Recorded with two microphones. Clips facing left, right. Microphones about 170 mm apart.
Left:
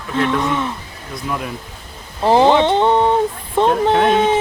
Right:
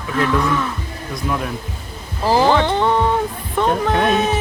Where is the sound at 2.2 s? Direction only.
25° left (ahead or behind).